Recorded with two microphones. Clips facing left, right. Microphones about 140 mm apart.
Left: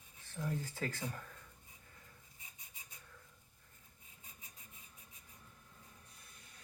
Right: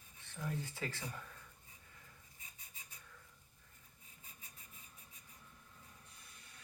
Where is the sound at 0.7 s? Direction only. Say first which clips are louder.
Left 3 dB; 45° left (ahead or behind).